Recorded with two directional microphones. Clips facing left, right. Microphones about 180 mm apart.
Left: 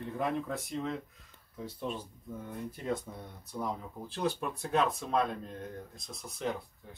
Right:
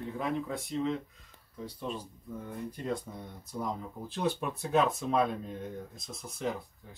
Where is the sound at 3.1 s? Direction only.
Centre (ahead or behind).